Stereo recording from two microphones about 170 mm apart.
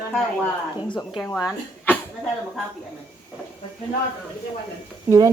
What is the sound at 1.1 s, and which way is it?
Speech, 5° left (ahead or behind).